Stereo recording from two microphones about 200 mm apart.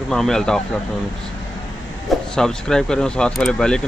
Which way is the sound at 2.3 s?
5° left (ahead or behind).